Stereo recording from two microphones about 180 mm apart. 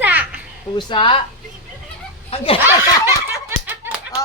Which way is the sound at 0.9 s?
30° left (ahead or behind).